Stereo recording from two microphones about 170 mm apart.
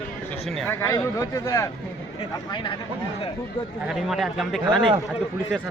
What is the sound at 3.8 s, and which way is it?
Speech, centre (ahead or behind).